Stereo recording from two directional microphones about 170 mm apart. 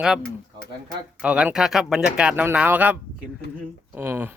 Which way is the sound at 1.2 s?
5° right (ahead or behind).